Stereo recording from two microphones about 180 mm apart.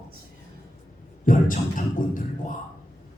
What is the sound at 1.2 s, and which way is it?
Music, 50° left (ahead or behind).